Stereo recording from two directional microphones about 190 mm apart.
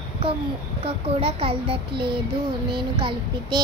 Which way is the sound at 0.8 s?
30° right (ahead or behind).